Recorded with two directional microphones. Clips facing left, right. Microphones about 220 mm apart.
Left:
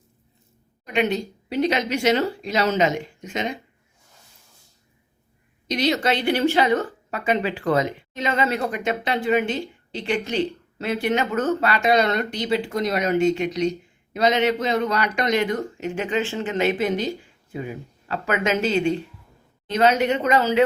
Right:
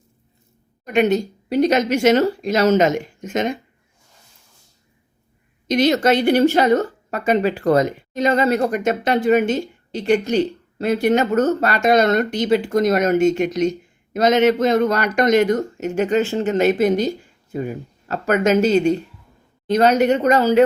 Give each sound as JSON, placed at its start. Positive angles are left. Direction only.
{"t": 0.9, "sound": "a woman's voice", "side_deg": -45}
{"t": 5.6, "sound": "a woman's voice", "side_deg": -50}